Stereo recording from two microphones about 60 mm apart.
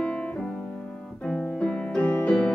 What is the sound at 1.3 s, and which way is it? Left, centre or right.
Piano, centre.